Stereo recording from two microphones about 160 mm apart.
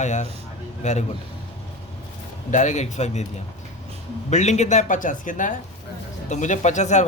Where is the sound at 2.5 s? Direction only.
50° left (ahead or behind).